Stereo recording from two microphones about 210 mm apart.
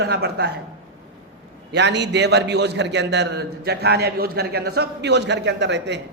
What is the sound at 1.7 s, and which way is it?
A man's voice, 55° right (ahead or behind).